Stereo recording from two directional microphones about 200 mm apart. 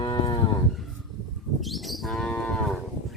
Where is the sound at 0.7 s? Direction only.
Centre (ahead or behind).